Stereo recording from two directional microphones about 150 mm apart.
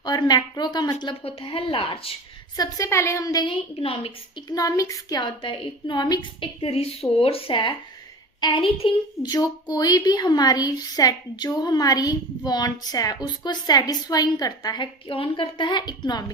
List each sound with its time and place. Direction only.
0.0 s a woman's voice: 30° left (ahead or behind)
2.6 s a woman's voice: 25° left (ahead or behind)
3.5 s a woman's voice: 40° left (ahead or behind)
4.4 s a woman's voice: 25° left (ahead or behind)